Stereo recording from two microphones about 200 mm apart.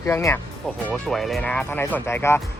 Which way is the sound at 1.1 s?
Centre (ahead or behind).